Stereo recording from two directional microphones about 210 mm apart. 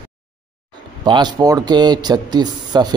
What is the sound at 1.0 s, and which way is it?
Speech, 20° right (ahead or behind).